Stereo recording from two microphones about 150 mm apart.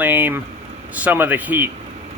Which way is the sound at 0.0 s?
10° right (ahead or behind).